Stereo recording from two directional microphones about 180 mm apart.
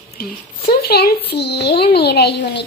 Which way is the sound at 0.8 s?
60° left (ahead or behind).